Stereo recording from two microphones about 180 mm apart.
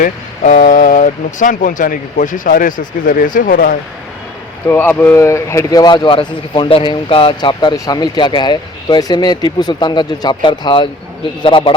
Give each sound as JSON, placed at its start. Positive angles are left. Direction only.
{"t": 0.0, "sound": "speech", "side_deg": 45}
{"t": 4.7, "sound": "speech", "side_deg": 10}